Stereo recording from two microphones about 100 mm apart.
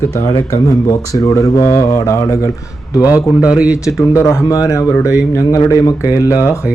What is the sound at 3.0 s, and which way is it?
Speech, 15° right (ahead or behind).